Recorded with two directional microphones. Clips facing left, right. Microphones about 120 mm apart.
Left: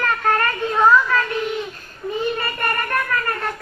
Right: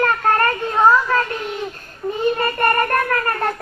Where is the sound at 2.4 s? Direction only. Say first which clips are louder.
Right 6 dB; 40° right (ahead or behind).